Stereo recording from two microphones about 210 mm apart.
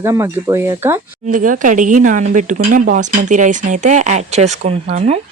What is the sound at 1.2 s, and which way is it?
Speech, 40° right (ahead or behind).